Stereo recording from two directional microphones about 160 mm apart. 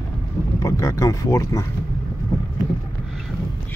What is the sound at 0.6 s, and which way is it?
Speech, 20° left (ahead or behind).